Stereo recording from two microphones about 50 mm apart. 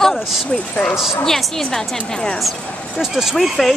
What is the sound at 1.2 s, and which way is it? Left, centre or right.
A woman's voice, centre.